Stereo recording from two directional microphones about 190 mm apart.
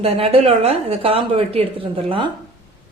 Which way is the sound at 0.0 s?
30° right (ahead or behind).